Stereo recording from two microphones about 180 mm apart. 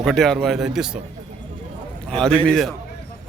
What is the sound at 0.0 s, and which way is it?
Speech, centre (ahead or behind).